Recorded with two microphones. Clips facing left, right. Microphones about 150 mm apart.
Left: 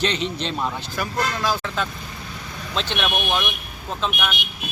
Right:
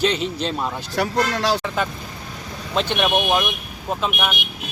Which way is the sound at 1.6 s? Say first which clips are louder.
Right 3 dB; 10° right (ahead or behind).